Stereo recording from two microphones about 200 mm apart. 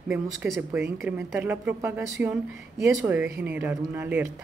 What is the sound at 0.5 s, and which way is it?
A woman's voice, 10° right (ahead or behind).